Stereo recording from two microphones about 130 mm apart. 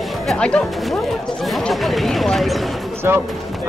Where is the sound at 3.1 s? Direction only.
20° right (ahead or behind).